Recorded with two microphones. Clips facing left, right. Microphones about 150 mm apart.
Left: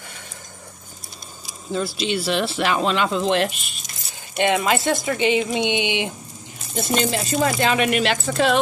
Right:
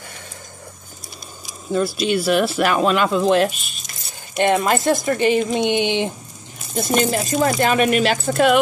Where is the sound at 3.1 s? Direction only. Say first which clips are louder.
Right 4 dB; 45° right (ahead or behind).